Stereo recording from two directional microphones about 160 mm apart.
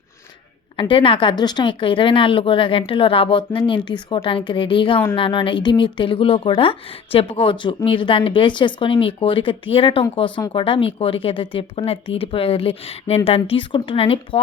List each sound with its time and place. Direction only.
0.8 s a woman's voice: 35° left (ahead or behind)